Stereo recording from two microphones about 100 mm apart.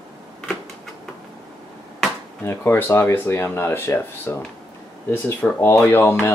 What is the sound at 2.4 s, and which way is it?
Speech, 20° left (ahead or behind).